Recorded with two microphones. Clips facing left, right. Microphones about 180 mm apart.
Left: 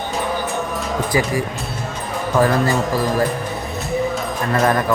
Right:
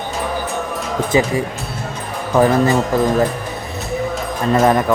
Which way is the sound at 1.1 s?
25° right (ahead or behind).